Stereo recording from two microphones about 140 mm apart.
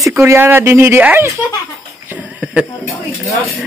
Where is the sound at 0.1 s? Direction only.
15° right (ahead or behind).